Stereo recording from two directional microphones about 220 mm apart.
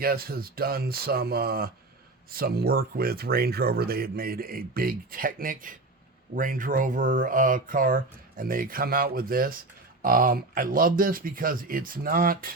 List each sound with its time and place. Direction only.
0.0 s speech: 45° right (ahead or behind)